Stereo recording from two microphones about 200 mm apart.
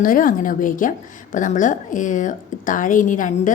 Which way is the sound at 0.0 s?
45° left (ahead or behind).